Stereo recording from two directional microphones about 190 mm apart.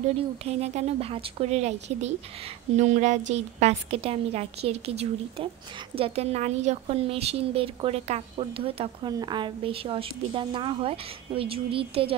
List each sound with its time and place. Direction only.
0.5 s a woman's voice: 35° right (ahead or behind)